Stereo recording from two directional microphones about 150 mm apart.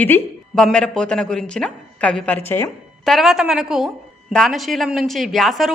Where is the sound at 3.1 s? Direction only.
Centre (ahead or behind).